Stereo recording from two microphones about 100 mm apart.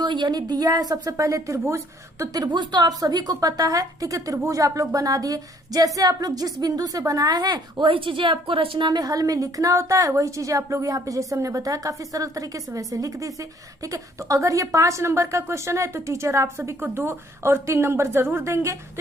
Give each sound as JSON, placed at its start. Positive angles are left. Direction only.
{"t": 0.0, "sound": "a woman's voice", "side_deg": -50}
{"t": 7.9, "sound": "a woman's voice", "side_deg": -60}
{"t": 8.9, "sound": "a woman's voice", "side_deg": -40}